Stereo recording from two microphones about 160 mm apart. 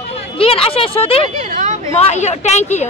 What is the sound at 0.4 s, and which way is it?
Speech, 35° left (ahead or behind).